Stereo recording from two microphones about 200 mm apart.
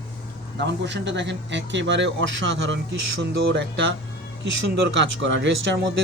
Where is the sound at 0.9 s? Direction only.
60° right (ahead or behind).